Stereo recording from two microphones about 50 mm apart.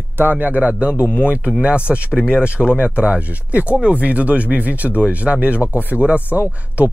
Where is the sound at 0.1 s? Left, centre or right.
Right.